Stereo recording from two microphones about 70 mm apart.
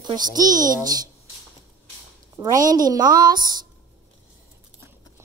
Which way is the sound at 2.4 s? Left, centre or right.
Right.